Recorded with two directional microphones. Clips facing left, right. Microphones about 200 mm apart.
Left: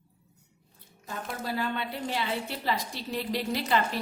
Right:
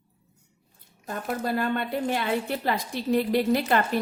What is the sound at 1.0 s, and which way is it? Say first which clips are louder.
A woman's voice: right 6 dB; 50° right (ahead or behind).